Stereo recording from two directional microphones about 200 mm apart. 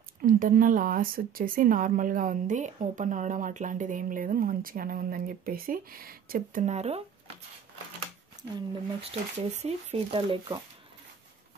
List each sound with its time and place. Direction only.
0.2 s a woman's voice: 45° right (ahead or behind)
8.4 s speech: 25° right (ahead or behind)